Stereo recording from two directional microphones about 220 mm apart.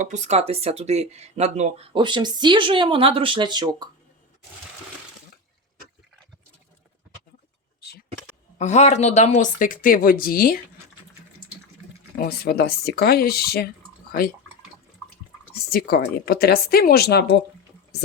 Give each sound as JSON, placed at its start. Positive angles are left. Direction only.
{"t": 0.0, "sound": "speech", "side_deg": -30}
{"t": 8.5, "sound": "speech", "side_deg": 30}
{"t": 12.2, "sound": "speech", "side_deg": 45}
{"t": 15.7, "sound": "speech", "side_deg": 45}